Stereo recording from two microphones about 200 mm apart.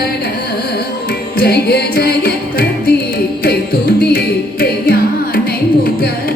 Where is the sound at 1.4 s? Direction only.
55° left (ahead or behind).